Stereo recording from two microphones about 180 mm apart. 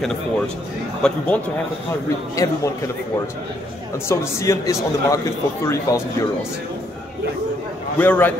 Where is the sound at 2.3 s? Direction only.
15° left (ahead or behind).